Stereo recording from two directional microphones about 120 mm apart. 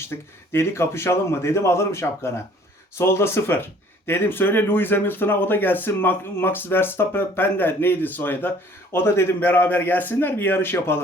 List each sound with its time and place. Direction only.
0.1 s speech: 25° left (ahead or behind)